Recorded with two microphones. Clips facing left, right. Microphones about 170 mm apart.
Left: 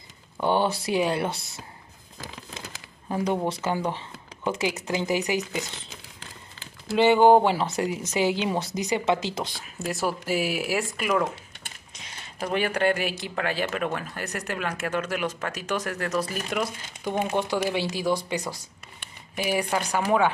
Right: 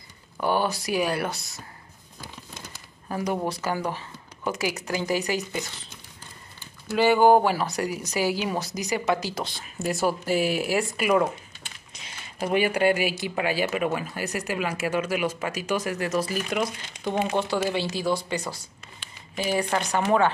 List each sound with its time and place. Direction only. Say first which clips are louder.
0.4 s speech: left 1 dB; 25° left (ahead or behind)
3.1 s speech: left 2 dB; 25° left (ahead or behind)
7.0 s speech: left 1 dB; 20° left (ahead or behind)
9.6 s speech: right 7 dB; centre (ahead or behind)
12.4 s speech: right 2 dB; 5° right (ahead or behind)
17.4 s speech: even; 15° left (ahead or behind)